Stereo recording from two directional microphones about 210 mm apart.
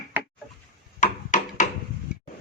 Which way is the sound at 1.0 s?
35° left (ahead or behind).